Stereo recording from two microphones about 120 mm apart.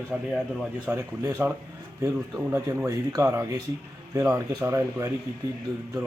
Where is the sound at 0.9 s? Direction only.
20° right (ahead or behind).